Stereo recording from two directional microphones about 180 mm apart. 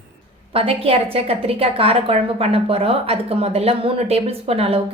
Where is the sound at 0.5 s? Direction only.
30° right (ahead or behind).